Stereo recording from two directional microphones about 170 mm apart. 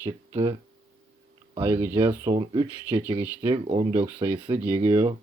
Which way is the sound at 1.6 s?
15° right (ahead or behind).